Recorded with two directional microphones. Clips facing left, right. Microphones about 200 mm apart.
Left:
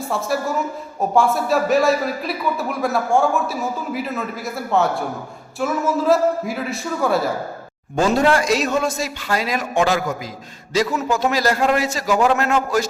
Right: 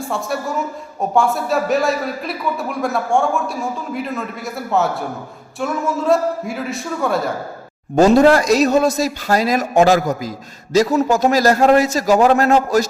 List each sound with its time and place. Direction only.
0.0 s a man's voice: centre (ahead or behind)
7.9 s a man's voice: 40° right (ahead or behind)